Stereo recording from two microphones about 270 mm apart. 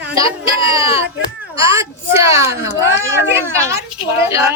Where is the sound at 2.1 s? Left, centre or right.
Centre.